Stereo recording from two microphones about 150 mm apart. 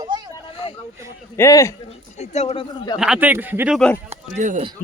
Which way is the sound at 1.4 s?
20° left (ahead or behind).